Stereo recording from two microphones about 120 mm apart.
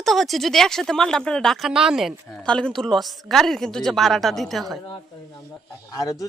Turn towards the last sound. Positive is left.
turn(degrees=30)  # may be behind; listen again after turning